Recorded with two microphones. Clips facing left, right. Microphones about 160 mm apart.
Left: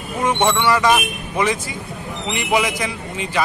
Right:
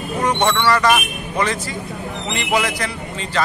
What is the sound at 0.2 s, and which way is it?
Speech, 15° left (ahead or behind).